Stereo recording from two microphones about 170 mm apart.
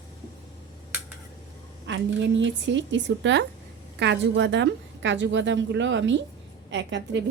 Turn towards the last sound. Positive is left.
turn(degrees=-90)